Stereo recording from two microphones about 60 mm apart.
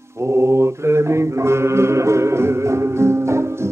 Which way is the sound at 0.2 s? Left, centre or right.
Right.